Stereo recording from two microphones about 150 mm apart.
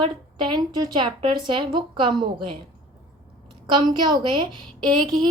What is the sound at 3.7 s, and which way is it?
A woman's voice, 30° right (ahead or behind).